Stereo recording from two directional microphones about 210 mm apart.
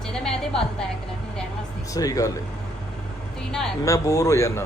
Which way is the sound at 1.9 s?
15° left (ahead or behind).